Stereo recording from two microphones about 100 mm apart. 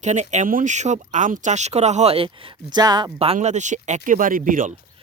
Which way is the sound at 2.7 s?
45° right (ahead or behind).